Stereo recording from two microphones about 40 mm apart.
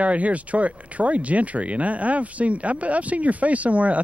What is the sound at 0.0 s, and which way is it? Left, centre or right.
Speech, right.